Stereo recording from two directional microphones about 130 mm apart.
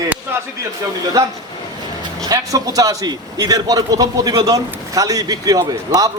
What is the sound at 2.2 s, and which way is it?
A man's voice, 30° right (ahead or behind).